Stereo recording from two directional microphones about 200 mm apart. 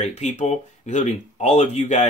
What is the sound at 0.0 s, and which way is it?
Speech, 35° left (ahead or behind).